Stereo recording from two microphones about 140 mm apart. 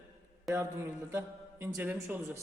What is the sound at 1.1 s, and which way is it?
A man's voice, 15° right (ahead or behind).